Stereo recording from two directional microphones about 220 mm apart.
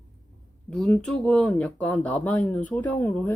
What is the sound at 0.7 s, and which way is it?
Speech, 5° left (ahead or behind).